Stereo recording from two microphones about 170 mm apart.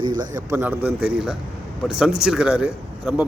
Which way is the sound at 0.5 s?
10° right (ahead or behind).